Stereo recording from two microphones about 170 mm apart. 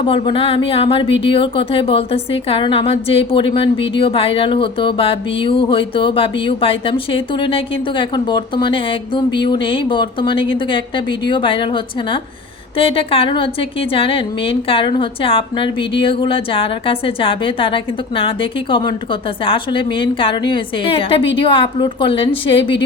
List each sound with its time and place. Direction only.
0.0 s speech: 30° left (ahead or behind)